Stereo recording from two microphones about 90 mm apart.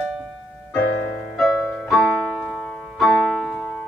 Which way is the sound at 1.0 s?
20° left (ahead or behind).